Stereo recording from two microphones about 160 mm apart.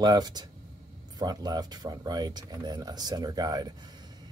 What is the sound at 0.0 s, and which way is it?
Speech, 25° right (ahead or behind).